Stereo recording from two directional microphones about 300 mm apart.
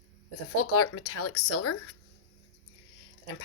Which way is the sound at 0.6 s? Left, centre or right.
Left.